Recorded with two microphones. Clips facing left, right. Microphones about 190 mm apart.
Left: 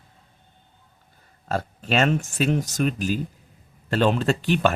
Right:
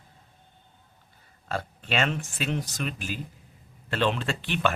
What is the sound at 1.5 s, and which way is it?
Speech, 40° left (ahead or behind).